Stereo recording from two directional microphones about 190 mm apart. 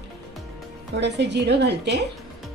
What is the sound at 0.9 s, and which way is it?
Speech, 65° right (ahead or behind).